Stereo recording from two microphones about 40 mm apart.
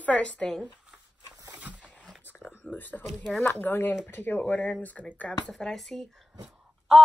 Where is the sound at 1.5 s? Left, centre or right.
Right.